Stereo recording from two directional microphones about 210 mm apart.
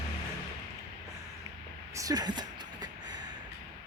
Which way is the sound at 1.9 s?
15° right (ahead or behind).